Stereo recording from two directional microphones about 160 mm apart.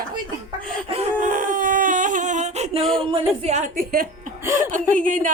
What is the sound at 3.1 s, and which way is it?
A woman's voice, 45° right (ahead or behind).